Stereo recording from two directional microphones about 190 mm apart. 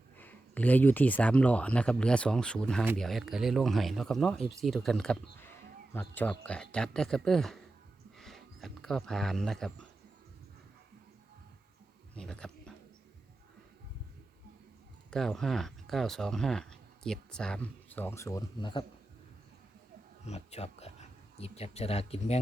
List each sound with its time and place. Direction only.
0.2 s speech: 10° left (ahead or behind)
12.1 s insect: 5° left (ahead or behind)
15.1 s speech: centre (ahead or behind); by 18.9 s 25° left (ahead or behind)
20.2 s speech: 35° left (ahead or behind)